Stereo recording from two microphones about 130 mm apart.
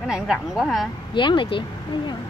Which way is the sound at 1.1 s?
40° left (ahead or behind).